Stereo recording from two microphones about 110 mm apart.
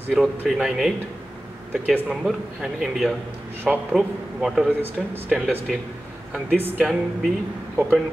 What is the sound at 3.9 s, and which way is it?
Speech, 5° right (ahead or behind).